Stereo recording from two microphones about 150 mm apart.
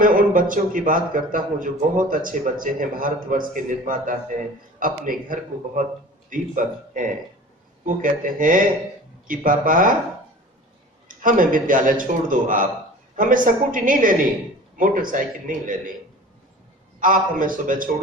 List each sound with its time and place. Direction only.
0.0 s a man's voice: 65° right (ahead or behind)
11.2 s a man's voice: 65° right (ahead or behind)
17.0 s a man's voice: 65° right (ahead or behind)